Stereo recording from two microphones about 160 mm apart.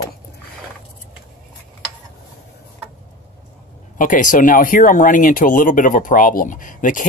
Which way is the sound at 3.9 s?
55° left (ahead or behind).